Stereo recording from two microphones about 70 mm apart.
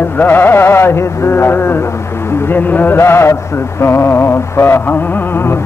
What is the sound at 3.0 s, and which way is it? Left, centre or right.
Music, left.